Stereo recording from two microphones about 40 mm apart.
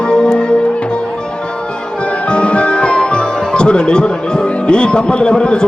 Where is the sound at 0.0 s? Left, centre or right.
Left.